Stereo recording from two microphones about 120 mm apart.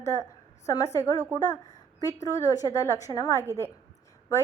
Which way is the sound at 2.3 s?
25° left (ahead or behind).